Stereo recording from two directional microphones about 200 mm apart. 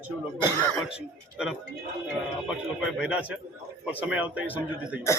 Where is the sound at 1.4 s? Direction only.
5° right (ahead or behind).